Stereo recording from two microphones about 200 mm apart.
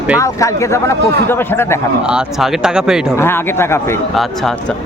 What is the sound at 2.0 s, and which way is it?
Speech, 5° right (ahead or behind).